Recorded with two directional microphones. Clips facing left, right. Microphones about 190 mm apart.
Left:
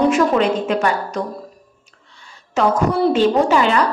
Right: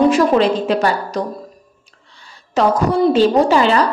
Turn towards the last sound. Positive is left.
turn(degrees=-30)  # may be behind; listen again after turning